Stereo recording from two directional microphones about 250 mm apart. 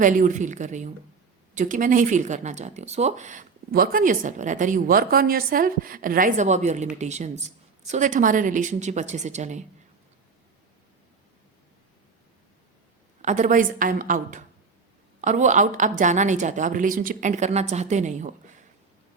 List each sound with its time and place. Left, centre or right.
0.0 s a woman's voice: right
13.2 s a woman's voice: right